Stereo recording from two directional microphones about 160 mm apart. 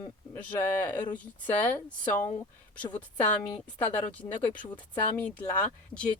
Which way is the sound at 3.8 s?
10° left (ahead or behind).